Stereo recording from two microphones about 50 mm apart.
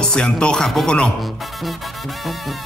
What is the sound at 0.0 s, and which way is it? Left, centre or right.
Speech, centre.